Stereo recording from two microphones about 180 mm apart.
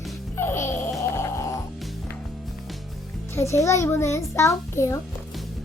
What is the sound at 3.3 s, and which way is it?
A child's voice, 15° left (ahead or behind).